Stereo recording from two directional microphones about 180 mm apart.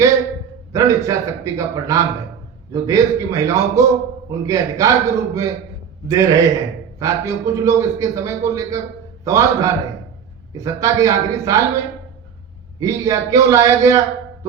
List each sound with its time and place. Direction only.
0.7 s a man's voice: 20° right (ahead or behind)
12.8 s a man's voice: 20° right (ahead or behind)